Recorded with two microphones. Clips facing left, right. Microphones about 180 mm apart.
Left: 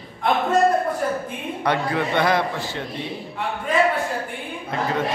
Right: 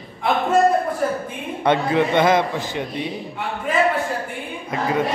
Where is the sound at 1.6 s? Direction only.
20° right (ahead or behind).